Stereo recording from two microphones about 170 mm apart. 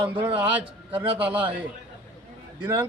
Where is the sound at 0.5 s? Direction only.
10° right (ahead or behind).